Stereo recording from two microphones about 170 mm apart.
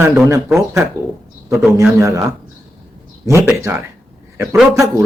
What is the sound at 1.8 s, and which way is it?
Speech, 15° right (ahead or behind).